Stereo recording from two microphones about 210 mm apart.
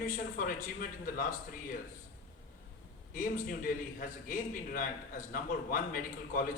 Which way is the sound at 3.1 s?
40° left (ahead or behind).